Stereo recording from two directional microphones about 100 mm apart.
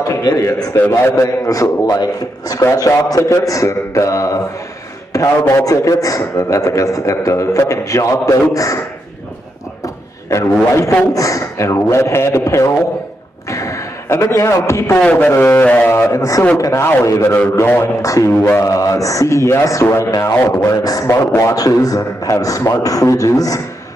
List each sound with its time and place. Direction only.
0.0 s a man's voice: 35° left (ahead or behind)
5.5 s a man's voice: 35° left (ahead or behind)
11.1 s a man's voice: 35° left (ahead or behind)
13.5 s a sound: 30° left (ahead or behind)
15.0 s a man's voice: 15° left (ahead or behind); by 18.3 s 30° left (ahead or behind)
18.3 s a man's voice: 20° left (ahead or behind)
18.6 s a man's voice: 35° left (ahead or behind)